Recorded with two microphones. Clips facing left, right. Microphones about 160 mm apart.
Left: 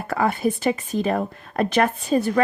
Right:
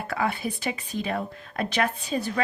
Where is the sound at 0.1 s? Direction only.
45° left (ahead or behind).